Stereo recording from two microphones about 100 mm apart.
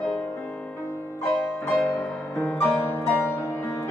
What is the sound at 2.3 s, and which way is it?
Music, 20° left (ahead or behind).